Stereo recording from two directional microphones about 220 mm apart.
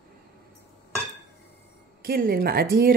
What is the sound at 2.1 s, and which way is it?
Speech, 40° right (ahead or behind).